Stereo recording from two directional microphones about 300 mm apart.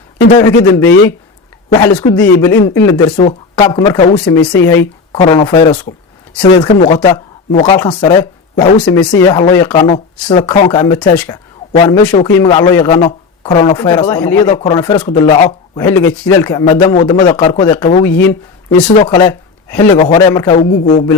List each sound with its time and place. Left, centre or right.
0.6 s speech: centre
8.8 s a man's voice: centre
18.9 s speech: centre
20.6 s a man's voice: left